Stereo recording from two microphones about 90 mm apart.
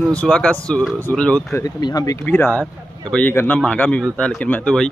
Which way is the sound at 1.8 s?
50° left (ahead or behind).